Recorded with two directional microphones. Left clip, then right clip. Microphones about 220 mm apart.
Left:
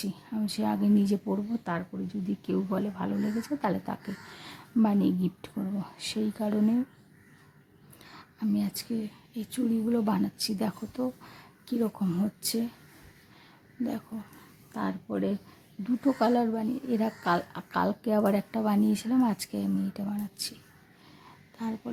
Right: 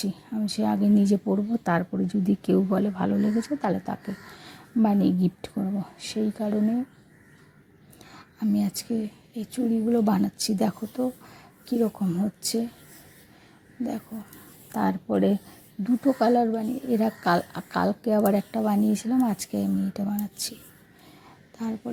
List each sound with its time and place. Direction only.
0.0 s speech: 10° right (ahead or behind)
1.6 s speech: 25° right (ahead or behind)
5.7 s speech: 5° right (ahead or behind)
8.1 s a woman's voice: 15° right (ahead or behind)
13.8 s speech: 5° right (ahead or behind)
14.7 s speech: 20° right (ahead or behind)
21.6 s speech: 10° right (ahead or behind)